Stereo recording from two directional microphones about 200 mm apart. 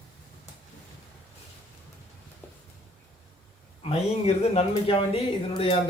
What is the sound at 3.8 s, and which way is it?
Speech, 30° left (ahead or behind).